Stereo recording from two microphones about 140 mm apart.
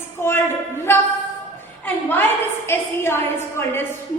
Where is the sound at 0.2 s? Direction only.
15° left (ahead or behind).